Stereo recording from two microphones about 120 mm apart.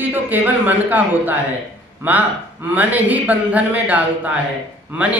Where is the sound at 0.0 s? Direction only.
15° right (ahead or behind).